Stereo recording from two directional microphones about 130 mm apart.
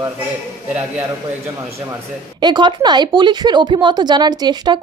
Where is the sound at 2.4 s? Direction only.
35° right (ahead or behind).